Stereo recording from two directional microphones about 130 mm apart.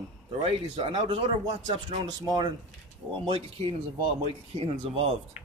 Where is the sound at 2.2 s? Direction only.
35° right (ahead or behind).